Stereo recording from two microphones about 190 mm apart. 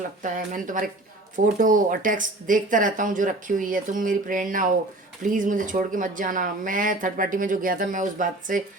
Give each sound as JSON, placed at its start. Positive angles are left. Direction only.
{"t": 0.2, "sound": "speech", "side_deg": -45}